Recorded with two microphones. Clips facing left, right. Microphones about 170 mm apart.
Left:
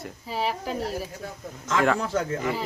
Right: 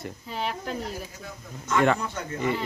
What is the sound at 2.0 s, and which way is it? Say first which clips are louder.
Speech: left 7 dB; 90° left.